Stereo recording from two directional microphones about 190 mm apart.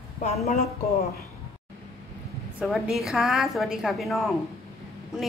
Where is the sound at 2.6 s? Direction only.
Centre (ahead or behind).